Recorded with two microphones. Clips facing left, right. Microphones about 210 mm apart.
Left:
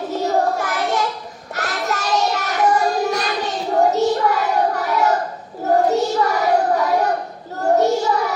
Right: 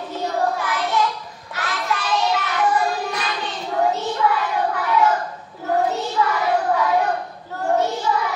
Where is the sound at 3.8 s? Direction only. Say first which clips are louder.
Left 4 dB; 45° left (ahead or behind).